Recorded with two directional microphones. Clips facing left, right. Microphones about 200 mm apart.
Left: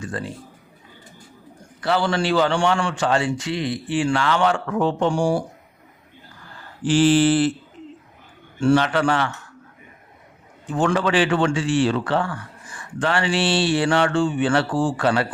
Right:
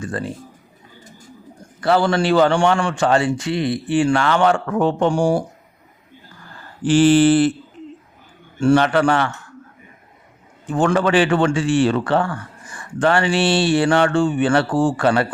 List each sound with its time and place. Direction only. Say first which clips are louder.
0.0 s a man's voice: right 3 dB; 50° right (ahead or behind)
1.8 s a man's voice: right 4 dB; 45° right (ahead or behind)
6.8 s mantra: right 4 dB; 55° right (ahead or behind)
8.6 s a man's voice: right 3 dB; 50° right (ahead or behind)
10.7 s a man's voice: right 3 dB; 50° right (ahead or behind)